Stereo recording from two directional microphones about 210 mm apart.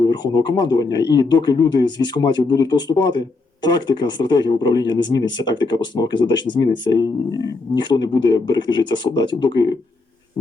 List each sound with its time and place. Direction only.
0.1 s speech: 20° left (ahead or behind)